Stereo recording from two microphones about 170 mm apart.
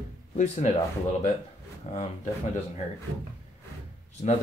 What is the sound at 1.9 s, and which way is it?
Speech, 40° left (ahead or behind).